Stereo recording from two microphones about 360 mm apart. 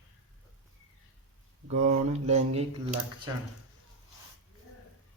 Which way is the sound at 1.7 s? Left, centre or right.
Centre.